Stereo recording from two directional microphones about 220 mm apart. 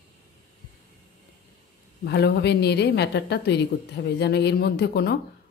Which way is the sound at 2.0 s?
50° left (ahead or behind).